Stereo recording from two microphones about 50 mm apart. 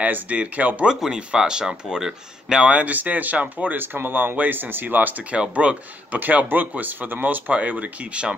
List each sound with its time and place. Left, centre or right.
0.0 s speech: right
0.8 s speech: centre
2.6 s speech: right
3.6 s speech: right
5.3 s speech: right
6.1 s speech: right